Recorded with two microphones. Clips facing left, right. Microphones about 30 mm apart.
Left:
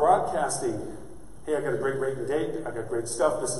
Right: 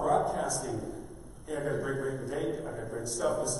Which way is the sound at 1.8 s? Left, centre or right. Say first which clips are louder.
Left 6 dB; left.